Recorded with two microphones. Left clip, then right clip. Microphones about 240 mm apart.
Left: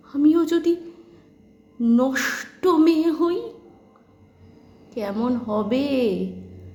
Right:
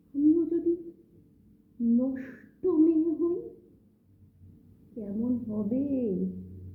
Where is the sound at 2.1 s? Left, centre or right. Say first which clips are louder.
Left 16 dB; left.